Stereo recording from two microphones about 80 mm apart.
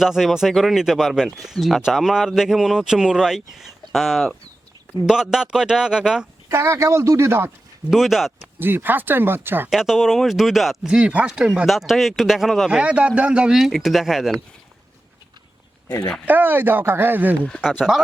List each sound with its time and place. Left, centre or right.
0.0 s speech: centre
6.5 s speech: right
7.9 s speech: centre
8.5 s speech: right
9.6 s speech: centre
16.2 s speech: right